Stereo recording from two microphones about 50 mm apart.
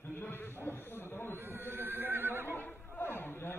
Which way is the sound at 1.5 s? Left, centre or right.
Right.